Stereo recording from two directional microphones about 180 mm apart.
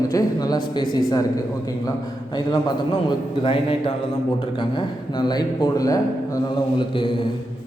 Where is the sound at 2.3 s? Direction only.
25° left (ahead or behind).